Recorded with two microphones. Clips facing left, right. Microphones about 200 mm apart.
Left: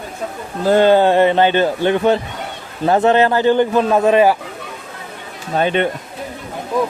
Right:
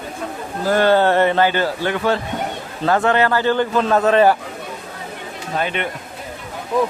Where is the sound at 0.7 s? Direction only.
20° left (ahead or behind).